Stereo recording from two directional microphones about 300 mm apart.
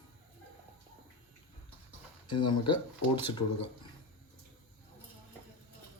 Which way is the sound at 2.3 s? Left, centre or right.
Centre.